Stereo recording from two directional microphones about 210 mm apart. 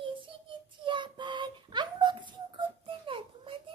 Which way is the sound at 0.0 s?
25° right (ahead or behind).